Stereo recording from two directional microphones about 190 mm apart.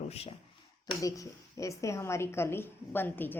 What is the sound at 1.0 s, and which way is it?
A woman's voice, 15° left (ahead or behind).